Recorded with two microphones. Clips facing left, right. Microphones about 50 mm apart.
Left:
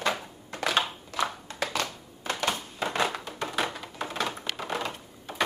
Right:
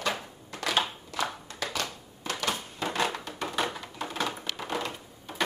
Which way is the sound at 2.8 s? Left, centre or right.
Centre.